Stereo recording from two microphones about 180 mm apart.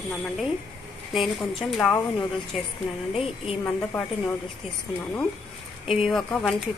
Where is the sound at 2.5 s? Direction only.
5° right (ahead or behind).